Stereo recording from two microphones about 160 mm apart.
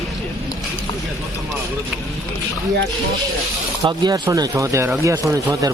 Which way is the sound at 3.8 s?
25° right (ahead or behind).